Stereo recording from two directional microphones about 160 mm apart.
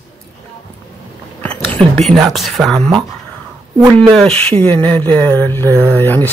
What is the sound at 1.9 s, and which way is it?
Speech, centre (ahead or behind).